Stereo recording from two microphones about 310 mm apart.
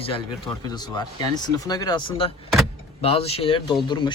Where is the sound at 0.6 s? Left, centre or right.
Centre.